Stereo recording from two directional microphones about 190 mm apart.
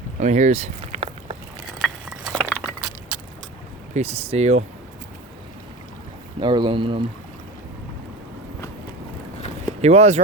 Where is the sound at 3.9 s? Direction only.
35° right (ahead or behind).